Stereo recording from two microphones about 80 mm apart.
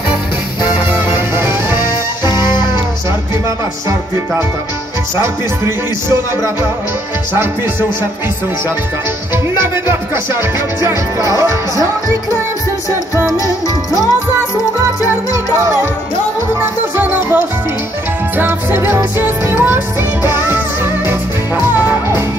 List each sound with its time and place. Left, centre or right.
1.1 s music: right
2.2 s music: left
10.8 s music: right
15.0 s music: right
16.9 s music: centre
18.4 s music: right
21.1 s music: right